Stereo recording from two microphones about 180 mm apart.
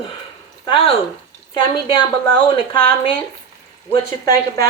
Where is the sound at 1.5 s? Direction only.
25° left (ahead or behind).